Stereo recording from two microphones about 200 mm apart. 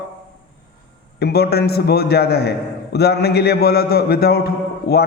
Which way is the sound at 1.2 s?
55° left (ahead or behind).